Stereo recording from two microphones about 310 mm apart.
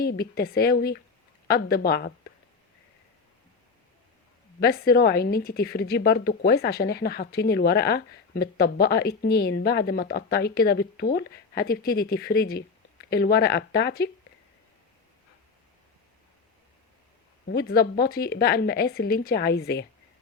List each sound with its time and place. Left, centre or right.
0.0 s speech: left
4.6 s speech: left
17.5 s speech: left